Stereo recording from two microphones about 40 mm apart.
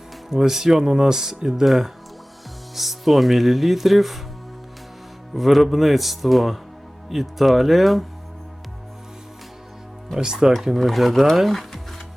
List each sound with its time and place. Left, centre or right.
0.3 s speech: centre
5.3 s speech: centre
10.2 s speech: centre